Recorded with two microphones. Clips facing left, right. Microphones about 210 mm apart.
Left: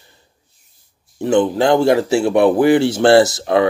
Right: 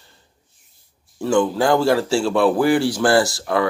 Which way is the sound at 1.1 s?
20° left (ahead or behind).